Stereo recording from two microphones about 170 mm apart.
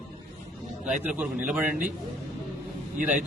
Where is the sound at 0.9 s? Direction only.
5° right (ahead or behind).